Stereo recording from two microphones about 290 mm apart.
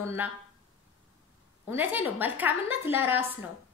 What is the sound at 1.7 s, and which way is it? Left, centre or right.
A woman's voice, centre.